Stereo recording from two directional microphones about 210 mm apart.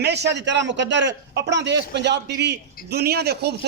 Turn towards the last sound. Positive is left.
turn(degrees=-50)  # may be behind; listen again after turning